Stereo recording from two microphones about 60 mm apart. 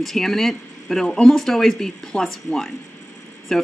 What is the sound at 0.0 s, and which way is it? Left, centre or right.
Speech, centre.